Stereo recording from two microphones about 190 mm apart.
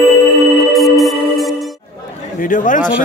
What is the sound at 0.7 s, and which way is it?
Music, centre (ahead or behind).